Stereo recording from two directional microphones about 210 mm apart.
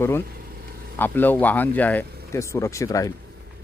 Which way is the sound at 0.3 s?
45° right (ahead or behind).